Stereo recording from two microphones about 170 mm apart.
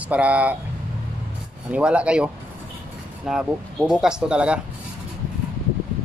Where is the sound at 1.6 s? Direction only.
5° right (ahead or behind).